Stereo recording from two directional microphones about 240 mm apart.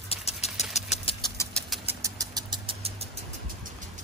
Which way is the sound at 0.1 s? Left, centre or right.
Left.